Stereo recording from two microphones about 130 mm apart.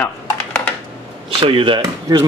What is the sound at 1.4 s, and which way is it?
Speech, 40° right (ahead or behind).